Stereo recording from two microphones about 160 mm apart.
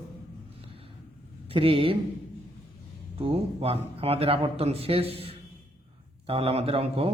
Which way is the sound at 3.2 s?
35° right (ahead or behind).